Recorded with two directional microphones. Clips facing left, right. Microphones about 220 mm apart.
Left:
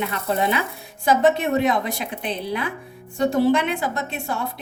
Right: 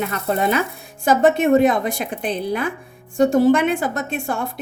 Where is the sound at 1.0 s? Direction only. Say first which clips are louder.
Right 3 dB; 50° right (ahead or behind).